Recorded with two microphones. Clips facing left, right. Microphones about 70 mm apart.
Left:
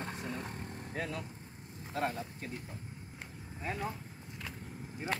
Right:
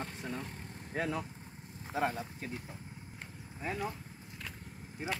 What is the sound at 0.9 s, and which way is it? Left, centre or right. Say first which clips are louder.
Speech: right 4 dB; right.